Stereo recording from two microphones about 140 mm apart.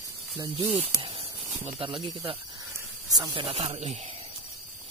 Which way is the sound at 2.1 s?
40° right (ahead or behind).